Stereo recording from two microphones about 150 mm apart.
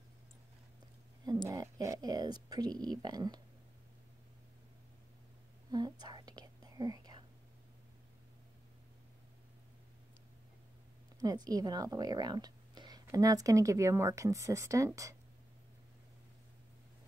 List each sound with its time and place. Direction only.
1.5 s a woman's voice: 25° right (ahead or behind)
5.7 s whispering: 25° right (ahead or behind)
11.1 s a woman's voice: 25° right (ahead or behind)